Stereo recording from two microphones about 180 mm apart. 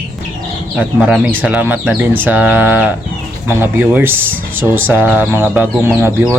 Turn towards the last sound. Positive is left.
turn(degrees=-10)  # may be behind; listen again after turning